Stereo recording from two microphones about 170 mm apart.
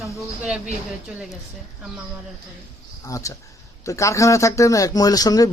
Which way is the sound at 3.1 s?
20° left (ahead or behind).